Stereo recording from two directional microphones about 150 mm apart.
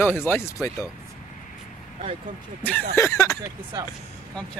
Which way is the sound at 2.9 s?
20° left (ahead or behind).